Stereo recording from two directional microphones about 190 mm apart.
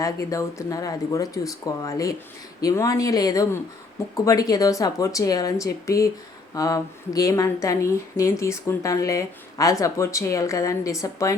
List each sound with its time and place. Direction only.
0.0 s a woman's voice: 15° left (ahead or behind)